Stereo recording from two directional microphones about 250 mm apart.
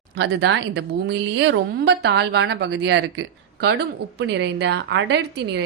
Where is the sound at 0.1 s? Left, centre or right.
Right.